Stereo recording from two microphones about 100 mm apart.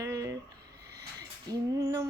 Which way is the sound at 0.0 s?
30° right (ahead or behind).